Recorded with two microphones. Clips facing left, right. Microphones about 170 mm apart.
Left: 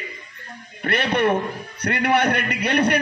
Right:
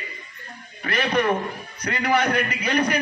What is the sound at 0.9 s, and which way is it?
A man's voice, 60° left (ahead or behind).